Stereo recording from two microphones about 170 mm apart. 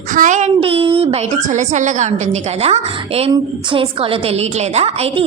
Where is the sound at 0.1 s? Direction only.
45° right (ahead or behind).